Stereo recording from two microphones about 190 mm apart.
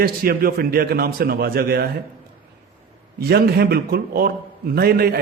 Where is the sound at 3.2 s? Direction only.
55° right (ahead or behind).